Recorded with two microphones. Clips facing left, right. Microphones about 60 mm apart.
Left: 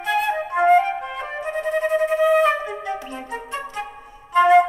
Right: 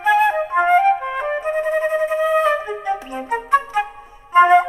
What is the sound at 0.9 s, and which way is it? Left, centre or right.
Flute, right.